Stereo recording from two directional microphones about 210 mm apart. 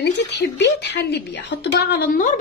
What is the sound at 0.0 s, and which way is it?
A woman's voice, 55° left (ahead or behind).